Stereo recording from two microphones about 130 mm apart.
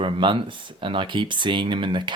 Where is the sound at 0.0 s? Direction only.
40° right (ahead or behind).